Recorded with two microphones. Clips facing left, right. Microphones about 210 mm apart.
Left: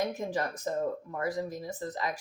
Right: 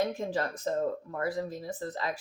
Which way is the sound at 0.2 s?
15° left (ahead or behind).